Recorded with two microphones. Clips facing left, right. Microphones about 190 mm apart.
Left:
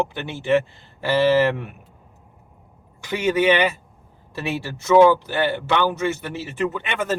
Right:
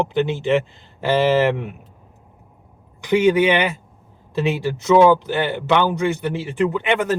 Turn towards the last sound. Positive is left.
turn(degrees=-15)  # may be behind; listen again after turning